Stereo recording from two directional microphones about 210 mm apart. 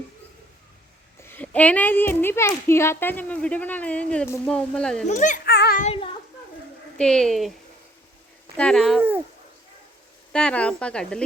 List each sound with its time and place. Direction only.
1.3 s speech: 5° left (ahead or behind)
5.0 s a child's voice: 35° left (ahead or behind)
5.5 s child singing: 50° left (ahead or behind)
5.8 s a child's voice: 25° left (ahead or behind)
7.0 s speech: 5° left (ahead or behind)
8.5 s speech: 5° left (ahead or behind)
9.0 s speech: 10° right (ahead or behind)
10.3 s speech: 5° left (ahead or behind)